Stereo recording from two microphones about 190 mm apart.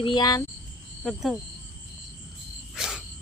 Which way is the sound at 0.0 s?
25° left (ahead or behind).